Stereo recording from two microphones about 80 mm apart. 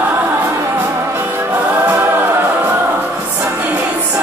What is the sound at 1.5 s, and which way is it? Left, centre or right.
Music, right.